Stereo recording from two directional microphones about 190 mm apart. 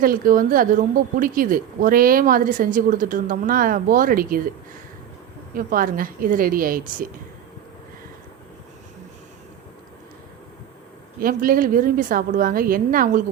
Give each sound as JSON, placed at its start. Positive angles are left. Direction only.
{"t": 0.0, "sound": "speech", "side_deg": -45}
{"t": 5.5, "sound": "speech", "side_deg": -50}
{"t": 11.2, "sound": "speech", "side_deg": -50}